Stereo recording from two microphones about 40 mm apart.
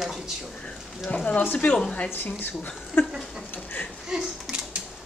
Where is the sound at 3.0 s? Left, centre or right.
Left.